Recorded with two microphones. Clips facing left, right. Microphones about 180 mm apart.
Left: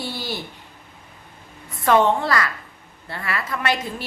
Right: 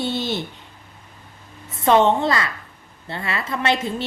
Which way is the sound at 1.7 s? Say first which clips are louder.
Right 1 dB; 25° right (ahead or behind).